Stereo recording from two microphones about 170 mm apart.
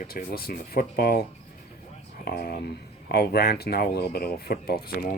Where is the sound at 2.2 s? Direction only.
60° left (ahead or behind).